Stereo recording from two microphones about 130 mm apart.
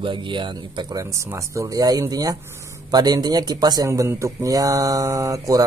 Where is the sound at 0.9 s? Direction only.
25° right (ahead or behind).